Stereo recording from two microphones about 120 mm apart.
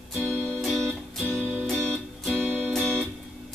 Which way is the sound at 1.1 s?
Centre (ahead or behind).